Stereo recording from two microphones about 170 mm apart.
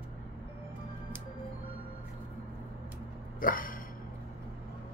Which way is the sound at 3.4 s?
55° left (ahead or behind).